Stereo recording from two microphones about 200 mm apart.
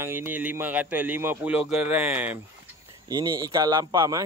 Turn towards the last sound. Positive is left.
turn(degrees=-20)  # may be behind; listen again after turning